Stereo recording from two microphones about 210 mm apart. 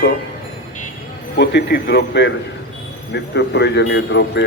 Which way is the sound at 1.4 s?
55° left (ahead or behind).